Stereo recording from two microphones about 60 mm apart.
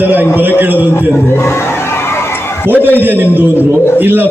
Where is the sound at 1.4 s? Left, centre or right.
Left.